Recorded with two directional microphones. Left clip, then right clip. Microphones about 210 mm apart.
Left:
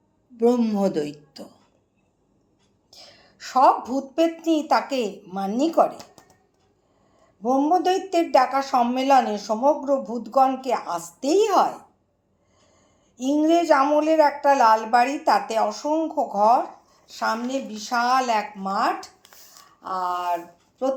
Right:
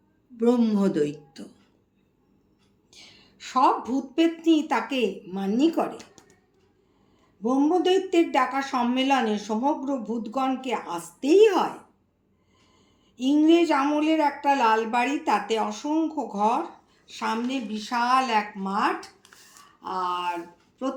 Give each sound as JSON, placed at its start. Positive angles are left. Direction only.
{"t": 0.3, "sound": "speech", "side_deg": -10}
{"t": 3.0, "sound": "a sound", "side_deg": 0}
{"t": 4.1, "sound": "speech", "side_deg": -5}
{"t": 6.0, "sound": "a sound", "side_deg": 10}
{"t": 7.4, "sound": "speech", "side_deg": -5}
{"t": 13.2, "sound": "speech", "side_deg": -5}